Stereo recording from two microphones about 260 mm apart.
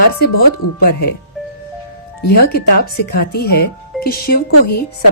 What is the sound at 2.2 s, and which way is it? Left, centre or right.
Speech, left.